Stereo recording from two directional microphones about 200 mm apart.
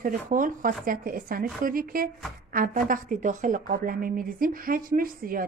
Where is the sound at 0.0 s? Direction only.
45° right (ahead or behind).